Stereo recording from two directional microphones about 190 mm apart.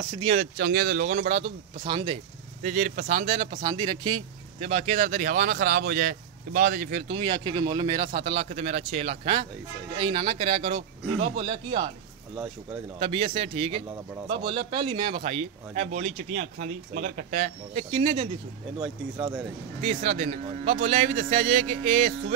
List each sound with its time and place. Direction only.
0.2 s speech: 40° right (ahead or behind)
2.6 s speech: 40° right (ahead or behind)
13.0 s speech: 30° right (ahead or behind)
19.8 s speech: 35° right (ahead or behind)